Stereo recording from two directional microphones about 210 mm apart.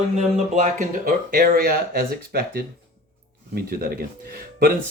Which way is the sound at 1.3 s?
45° right (ahead or behind).